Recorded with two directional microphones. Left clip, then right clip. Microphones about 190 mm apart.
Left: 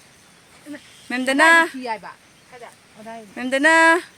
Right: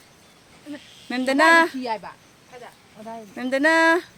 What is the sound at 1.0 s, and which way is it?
Speech, 10° left (ahead or behind).